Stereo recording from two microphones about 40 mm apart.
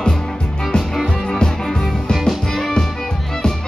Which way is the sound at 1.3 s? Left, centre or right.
Centre.